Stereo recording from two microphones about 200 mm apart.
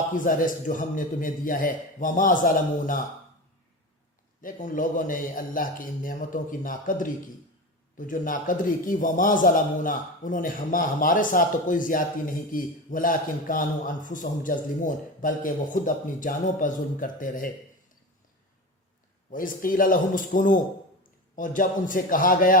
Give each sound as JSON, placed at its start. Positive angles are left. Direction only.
{"t": 0.3, "sound": "a man's voice", "side_deg": 45}
{"t": 4.4, "sound": "a man's voice", "side_deg": 40}
{"t": 19.3, "sound": "a man's voice", "side_deg": 45}